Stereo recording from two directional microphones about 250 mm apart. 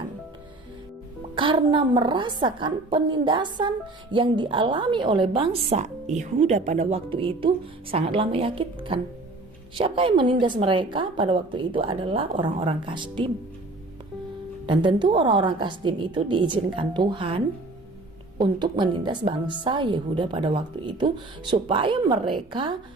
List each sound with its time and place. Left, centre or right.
1.4 s a woman's voice: centre
14.7 s a woman's voice: centre